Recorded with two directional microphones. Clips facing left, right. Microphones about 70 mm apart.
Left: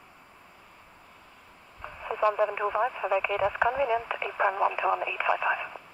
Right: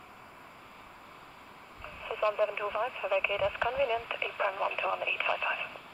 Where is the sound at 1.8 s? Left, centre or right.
Left.